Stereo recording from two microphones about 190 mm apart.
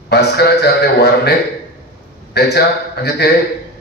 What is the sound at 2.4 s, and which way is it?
Speech, 60° left (ahead or behind).